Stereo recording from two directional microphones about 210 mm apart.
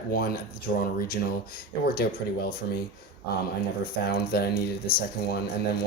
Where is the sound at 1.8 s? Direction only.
45° left (ahead or behind).